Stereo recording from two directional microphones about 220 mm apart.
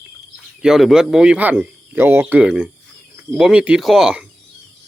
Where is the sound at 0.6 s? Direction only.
Centre (ahead or behind).